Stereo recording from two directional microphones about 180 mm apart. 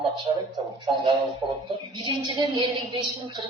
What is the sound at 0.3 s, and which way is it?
Speech, 25° right (ahead or behind).